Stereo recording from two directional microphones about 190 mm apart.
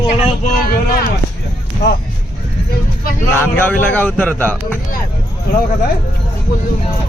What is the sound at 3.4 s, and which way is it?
Speech, 10° left (ahead or behind).